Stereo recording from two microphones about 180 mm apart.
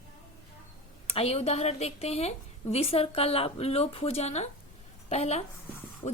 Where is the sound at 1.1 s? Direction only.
35° left (ahead or behind).